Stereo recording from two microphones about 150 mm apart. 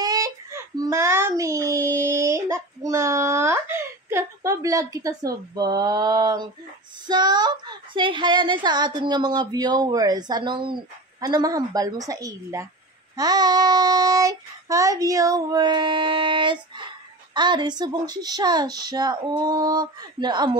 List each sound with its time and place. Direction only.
0.0 s child singing: 25° right (ahead or behind)
7.1 s a woman's voice: 30° right (ahead or behind)